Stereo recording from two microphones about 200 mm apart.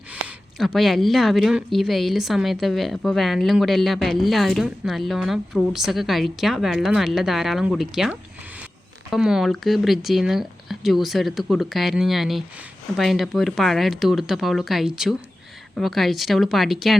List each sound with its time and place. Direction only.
0.1 s speech: 5° right (ahead or behind)